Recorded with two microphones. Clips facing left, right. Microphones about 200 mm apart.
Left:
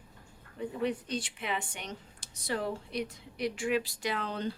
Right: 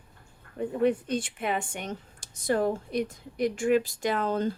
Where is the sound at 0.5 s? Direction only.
50° right (ahead or behind).